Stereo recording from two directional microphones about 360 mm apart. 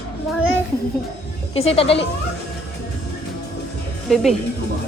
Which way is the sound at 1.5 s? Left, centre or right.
Centre.